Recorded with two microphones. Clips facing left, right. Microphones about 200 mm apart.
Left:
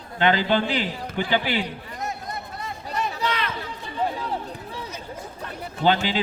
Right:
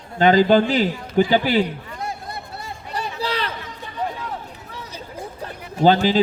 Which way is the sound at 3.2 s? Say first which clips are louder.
Right 2 dB; 35° right (ahead or behind).